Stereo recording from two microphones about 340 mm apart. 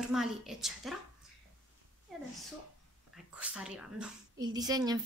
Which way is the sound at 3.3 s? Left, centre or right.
Centre.